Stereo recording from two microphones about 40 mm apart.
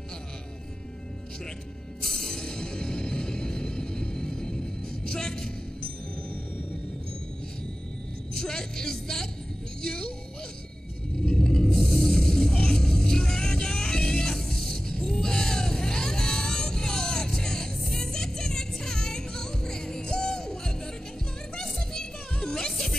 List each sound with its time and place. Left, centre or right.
2.0 s music: centre
8.4 s music: centre
11.2 s music: centre
11.7 s music: centre